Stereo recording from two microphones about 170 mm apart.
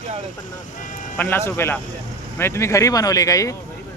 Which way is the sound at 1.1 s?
10° left (ahead or behind).